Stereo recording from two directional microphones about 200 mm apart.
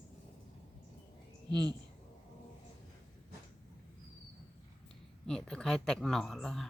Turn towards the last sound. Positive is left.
turn(degrees=0)  # may be behind; listen again after turning